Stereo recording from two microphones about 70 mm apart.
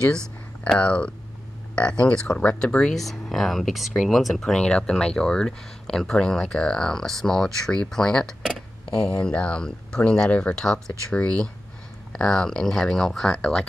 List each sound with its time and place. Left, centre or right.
0.7 s speech: centre
9.1 s speech: centre